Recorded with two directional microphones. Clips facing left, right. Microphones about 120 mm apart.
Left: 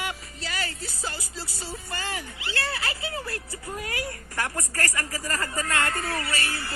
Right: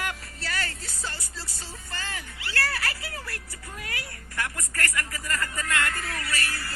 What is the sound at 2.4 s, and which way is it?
Speech, 25° left (ahead or behind).